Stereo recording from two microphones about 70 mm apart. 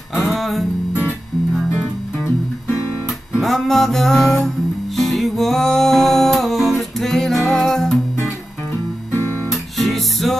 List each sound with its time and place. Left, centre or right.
0.1 s music: centre
3.3 s music: centre
9.1 s guitar: left
9.5 s music: centre